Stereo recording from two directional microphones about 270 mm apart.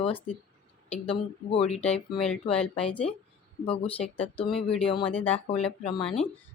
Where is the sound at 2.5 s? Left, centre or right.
Centre.